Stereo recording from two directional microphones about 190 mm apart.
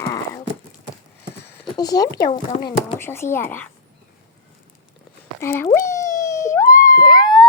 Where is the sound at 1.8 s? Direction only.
20° left (ahead or behind).